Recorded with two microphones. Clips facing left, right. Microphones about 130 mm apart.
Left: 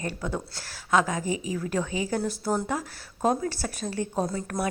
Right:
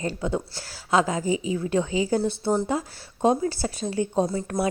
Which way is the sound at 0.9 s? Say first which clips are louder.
Right 2 dB; 30° right (ahead or behind).